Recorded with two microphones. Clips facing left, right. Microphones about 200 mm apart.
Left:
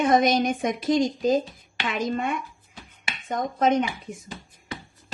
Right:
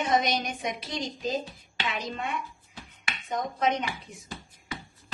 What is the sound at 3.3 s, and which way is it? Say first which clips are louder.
Speech: left 5 dB; 50° left (ahead or behind).